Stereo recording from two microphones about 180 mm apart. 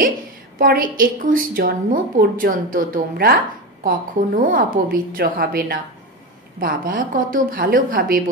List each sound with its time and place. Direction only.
0.6 s a woman's voice: 50° right (ahead or behind)